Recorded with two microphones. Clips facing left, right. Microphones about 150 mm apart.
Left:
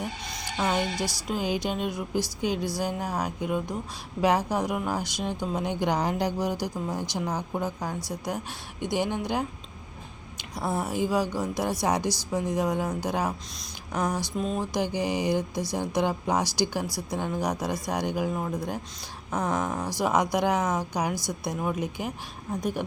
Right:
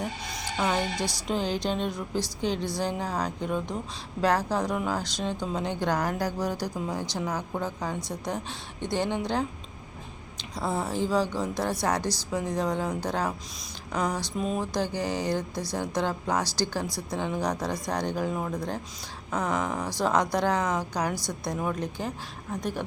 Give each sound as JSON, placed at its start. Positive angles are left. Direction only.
{"t": 0.5, "sound": "a woman's voice", "side_deg": 10}
{"t": 0.9, "sound": "speech", "side_deg": -15}
{"t": 1.3, "sound": "a woman's voice", "side_deg": 10}
{"t": 14.3, "sound": "mantra", "side_deg": -5}
{"t": 14.6, "sound": "speech", "side_deg": 15}